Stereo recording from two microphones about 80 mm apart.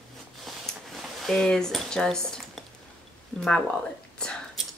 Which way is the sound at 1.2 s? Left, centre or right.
Centre.